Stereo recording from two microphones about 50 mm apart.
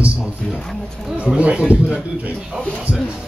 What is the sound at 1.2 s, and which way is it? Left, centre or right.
Speech, right.